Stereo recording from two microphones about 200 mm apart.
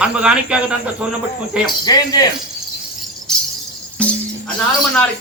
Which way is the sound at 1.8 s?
20° left (ahead or behind).